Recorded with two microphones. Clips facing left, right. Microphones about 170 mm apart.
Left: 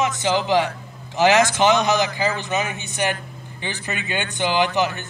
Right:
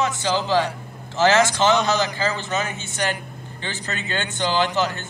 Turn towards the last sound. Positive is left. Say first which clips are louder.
# left 1 dB
turn(degrees=15)  # may be behind; listen again after turning